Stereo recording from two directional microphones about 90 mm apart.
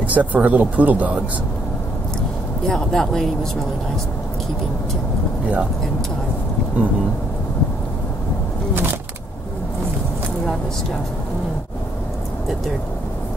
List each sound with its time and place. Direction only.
0.0 s speech: 15° right (ahead or behind)
2.7 s speech: 5° left (ahead or behind)